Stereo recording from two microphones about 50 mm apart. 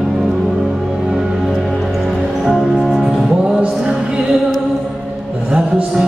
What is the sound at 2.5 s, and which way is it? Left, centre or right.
Music, centre.